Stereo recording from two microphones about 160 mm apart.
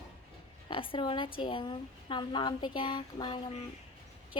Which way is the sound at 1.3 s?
30° left (ahead or behind).